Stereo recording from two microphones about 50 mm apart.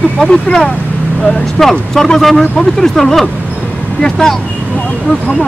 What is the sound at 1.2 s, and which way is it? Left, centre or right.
Speech, centre.